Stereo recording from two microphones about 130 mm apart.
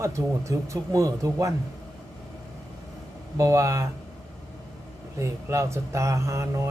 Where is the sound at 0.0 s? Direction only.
25° right (ahead or behind).